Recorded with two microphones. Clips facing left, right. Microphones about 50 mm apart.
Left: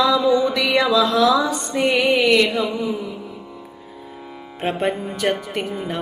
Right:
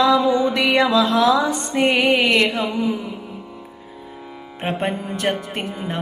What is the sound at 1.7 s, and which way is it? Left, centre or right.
Music, right.